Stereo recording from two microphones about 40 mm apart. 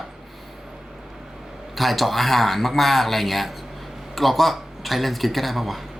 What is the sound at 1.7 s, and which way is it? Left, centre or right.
Speech, centre.